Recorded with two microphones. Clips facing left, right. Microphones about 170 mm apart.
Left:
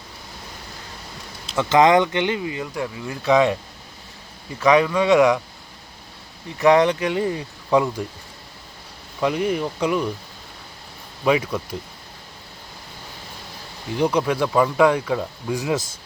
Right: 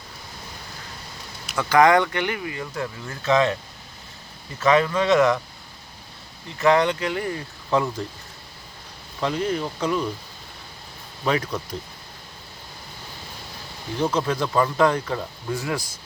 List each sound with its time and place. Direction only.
1.5 s speech: 25° left (ahead or behind)
4.6 s speech: 15° left (ahead or behind)
6.6 s speech: 20° left (ahead or behind)
9.2 s speech: 10° left (ahead or behind)
11.3 s speech: 10° left (ahead or behind)
14.0 s speech: 15° left (ahead or behind)